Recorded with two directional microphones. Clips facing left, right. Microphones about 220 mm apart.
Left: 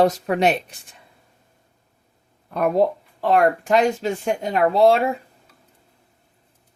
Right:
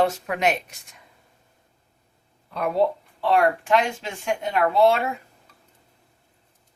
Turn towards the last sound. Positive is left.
turn(degrees=35)  # may be behind; listen again after turning